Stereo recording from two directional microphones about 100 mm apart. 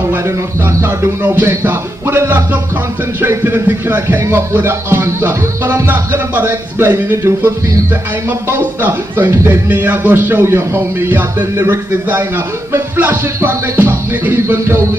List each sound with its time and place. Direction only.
0.1 s speech: 25° right (ahead or behind)
9.7 s speech: 15° right (ahead or behind)